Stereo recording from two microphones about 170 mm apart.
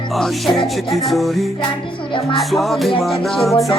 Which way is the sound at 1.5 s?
30° left (ahead or behind).